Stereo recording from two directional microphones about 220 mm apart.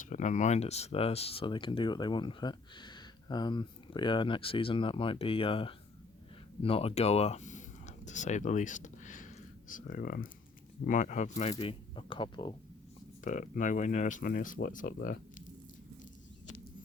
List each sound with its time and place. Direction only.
0.0 s speech: 35° left (ahead or behind)
13.2 s speech: 35° left (ahead or behind)